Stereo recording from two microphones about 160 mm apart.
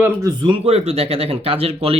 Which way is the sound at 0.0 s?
20° right (ahead or behind).